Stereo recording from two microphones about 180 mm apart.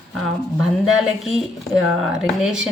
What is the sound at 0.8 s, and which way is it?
Speech, centre (ahead or behind).